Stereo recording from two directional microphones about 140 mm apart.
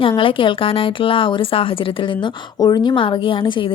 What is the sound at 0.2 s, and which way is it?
A woman's voice, 40° left (ahead or behind).